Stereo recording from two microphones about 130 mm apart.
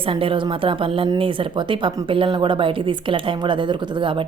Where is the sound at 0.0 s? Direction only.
45° right (ahead or behind).